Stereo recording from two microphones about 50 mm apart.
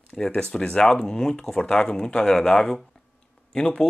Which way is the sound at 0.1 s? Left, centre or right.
Centre.